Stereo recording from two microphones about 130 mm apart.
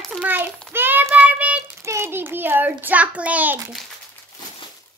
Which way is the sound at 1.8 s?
20° right (ahead or behind).